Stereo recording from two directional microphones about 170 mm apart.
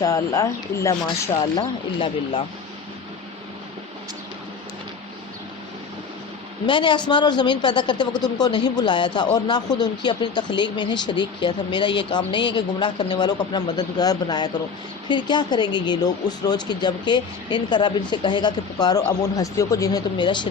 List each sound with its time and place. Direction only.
0.0 s speech: 20° left (ahead or behind)
1.5 s speech: 30° left (ahead or behind)
6.7 s speech: 30° left (ahead or behind)